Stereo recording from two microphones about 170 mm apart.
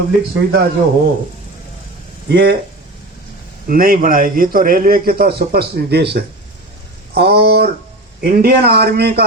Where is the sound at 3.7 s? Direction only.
55° right (ahead or behind).